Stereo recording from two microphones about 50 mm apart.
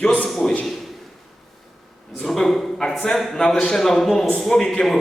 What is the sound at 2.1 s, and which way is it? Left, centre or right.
A man's voice, centre.